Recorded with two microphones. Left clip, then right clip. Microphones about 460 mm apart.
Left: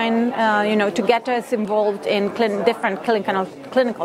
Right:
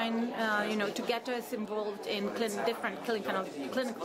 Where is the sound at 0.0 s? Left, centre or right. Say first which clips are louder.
Left 14 dB; left.